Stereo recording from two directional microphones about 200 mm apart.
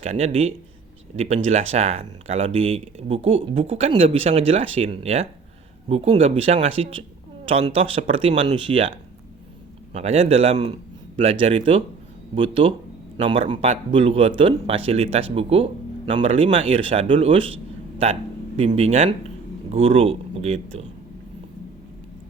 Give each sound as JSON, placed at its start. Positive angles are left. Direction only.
{"t": 0.0, "sound": "a man's voice", "side_deg": -30}
{"t": 9.9, "sound": "a man's voice", "side_deg": -30}